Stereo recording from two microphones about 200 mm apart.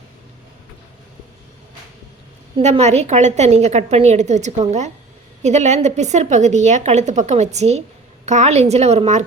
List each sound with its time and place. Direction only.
2.6 s a woman's voice: 35° right (ahead or behind)